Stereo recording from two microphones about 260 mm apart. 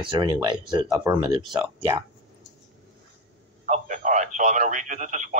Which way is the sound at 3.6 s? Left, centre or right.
Right.